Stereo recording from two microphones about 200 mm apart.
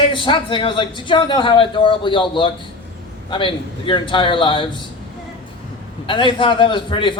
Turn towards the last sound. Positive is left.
turn(degrees=25)  # may be behind; listen again after turning